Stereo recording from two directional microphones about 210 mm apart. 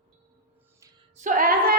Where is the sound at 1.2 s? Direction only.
40° right (ahead or behind).